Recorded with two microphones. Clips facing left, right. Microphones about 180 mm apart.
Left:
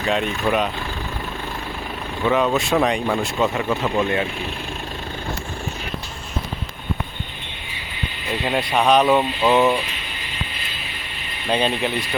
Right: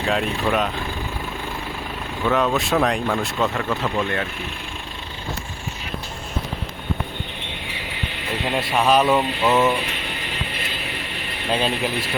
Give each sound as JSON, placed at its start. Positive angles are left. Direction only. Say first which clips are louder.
{"t": 0.0, "sound": "speech", "louder": "left 1 dB", "side_deg": 0}
{"t": 2.2, "sound": "speech", "louder": "left 1 dB", "side_deg": 0}
{"t": 8.4, "sound": "speech", "louder": "left 1 dB", "side_deg": 0}
{"t": 11.5, "sound": "speech", "louder": "left 2 dB", "side_deg": 0}